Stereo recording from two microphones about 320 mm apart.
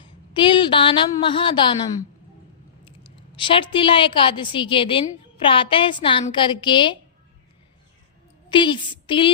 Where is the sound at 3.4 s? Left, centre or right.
Centre.